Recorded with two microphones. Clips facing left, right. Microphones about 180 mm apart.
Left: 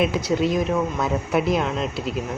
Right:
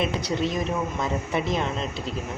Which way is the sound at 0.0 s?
Centre (ahead or behind).